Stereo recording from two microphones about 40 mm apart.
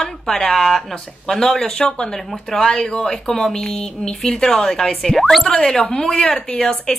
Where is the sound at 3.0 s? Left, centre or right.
Centre.